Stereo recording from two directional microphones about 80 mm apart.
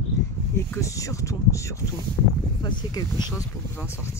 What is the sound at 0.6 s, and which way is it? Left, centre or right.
Speech, left.